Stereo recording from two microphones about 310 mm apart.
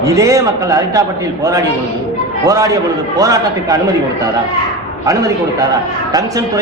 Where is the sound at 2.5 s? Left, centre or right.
Centre.